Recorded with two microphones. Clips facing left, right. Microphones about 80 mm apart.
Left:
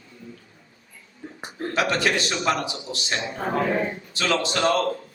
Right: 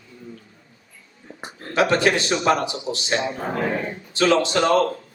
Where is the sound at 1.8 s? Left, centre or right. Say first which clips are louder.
Right 5 dB; right.